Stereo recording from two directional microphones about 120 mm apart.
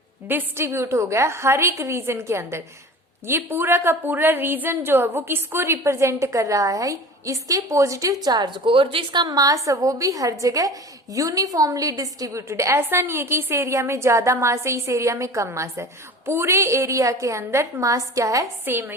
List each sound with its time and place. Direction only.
0.3 s a woman's voice: 20° right (ahead or behind)